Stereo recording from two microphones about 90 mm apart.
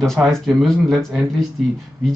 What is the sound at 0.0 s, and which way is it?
Speech, 5° left (ahead or behind).